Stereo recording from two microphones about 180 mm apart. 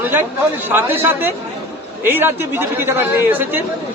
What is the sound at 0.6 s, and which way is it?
A man's voice, 10° right (ahead or behind).